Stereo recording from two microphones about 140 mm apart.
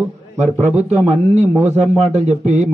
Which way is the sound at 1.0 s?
50° right (ahead or behind).